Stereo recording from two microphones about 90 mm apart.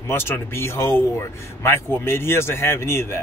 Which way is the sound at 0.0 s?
25° left (ahead or behind).